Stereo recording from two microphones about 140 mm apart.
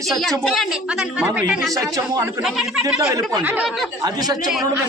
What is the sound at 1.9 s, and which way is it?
Speech, 20° right (ahead or behind).